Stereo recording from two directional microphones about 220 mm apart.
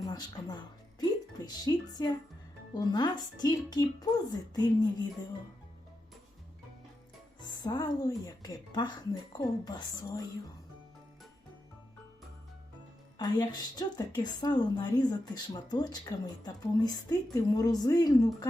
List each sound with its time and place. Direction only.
0.0 s a woman's voice: 15° left (ahead or behind)
7.6 s a woman's voice: 20° left (ahead or behind)
13.1 s a woman's voice: 20° left (ahead or behind)